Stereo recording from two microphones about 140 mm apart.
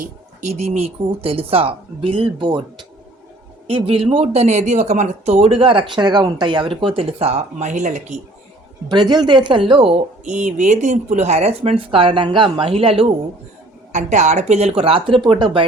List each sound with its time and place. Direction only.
0.5 s speech: 50° right (ahead or behind)
8.9 s speech: 30° right (ahead or behind)
10.3 s speech: 60° right (ahead or behind); by 13.1 s 45° right (ahead or behind)
13.9 s speech: 60° right (ahead or behind); by 15.6 s 35° right (ahead or behind)